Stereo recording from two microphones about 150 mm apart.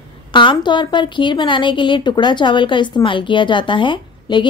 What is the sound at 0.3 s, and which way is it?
A woman's voice, 30° left (ahead or behind).